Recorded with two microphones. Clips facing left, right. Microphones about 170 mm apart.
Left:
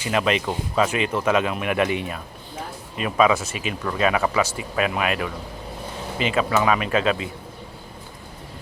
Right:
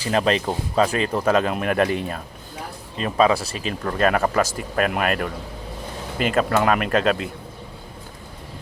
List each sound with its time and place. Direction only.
0.0 s speech: 35° right (ahead or behind)